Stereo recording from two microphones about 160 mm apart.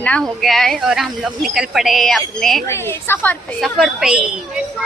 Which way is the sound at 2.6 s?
15° left (ahead or behind).